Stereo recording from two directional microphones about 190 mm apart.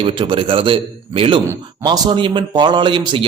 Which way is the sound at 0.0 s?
25° right (ahead or behind).